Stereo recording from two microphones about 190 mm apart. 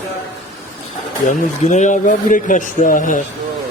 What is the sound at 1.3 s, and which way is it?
Speech, 40° left (ahead or behind).